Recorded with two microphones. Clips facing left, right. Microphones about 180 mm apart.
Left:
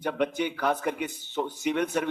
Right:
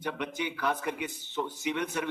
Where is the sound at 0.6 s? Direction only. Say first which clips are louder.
Left 3 dB; 50° left (ahead or behind).